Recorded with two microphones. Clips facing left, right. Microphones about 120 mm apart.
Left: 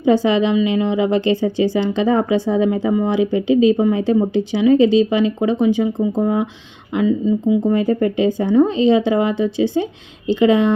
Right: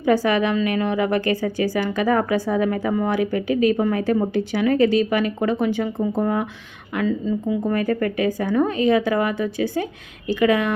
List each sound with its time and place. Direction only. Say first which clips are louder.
0.0 s a woman's voice: left 4 dB; 20° left (ahead or behind)